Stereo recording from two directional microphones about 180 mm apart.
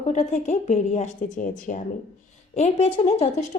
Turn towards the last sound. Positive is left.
turn(degrees=35)  # may be behind; listen again after turning